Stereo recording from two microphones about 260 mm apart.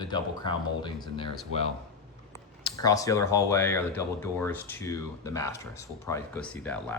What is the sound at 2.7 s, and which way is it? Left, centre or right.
Speech, centre.